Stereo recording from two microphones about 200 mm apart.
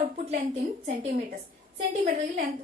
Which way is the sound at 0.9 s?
40° right (ahead or behind).